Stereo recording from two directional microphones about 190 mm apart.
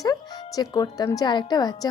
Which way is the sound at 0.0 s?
20° left (ahead or behind).